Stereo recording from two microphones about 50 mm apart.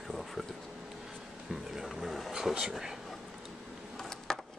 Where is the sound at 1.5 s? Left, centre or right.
Centre.